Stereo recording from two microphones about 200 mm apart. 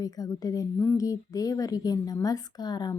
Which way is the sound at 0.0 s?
20° left (ahead or behind).